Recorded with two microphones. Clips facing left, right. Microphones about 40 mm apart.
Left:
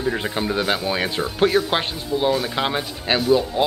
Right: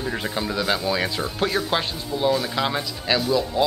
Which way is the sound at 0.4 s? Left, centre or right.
Left.